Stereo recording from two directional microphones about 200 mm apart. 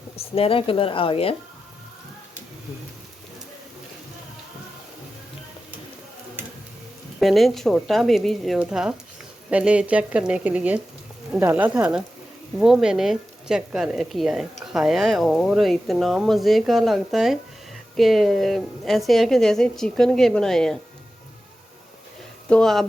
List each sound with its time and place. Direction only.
0.2 s speech: 30° left (ahead or behind)
7.2 s speech: centre (ahead or behind)
22.4 s speech: 5° left (ahead or behind)